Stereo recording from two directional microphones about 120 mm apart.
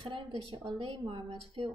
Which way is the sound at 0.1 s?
50° right (ahead or behind).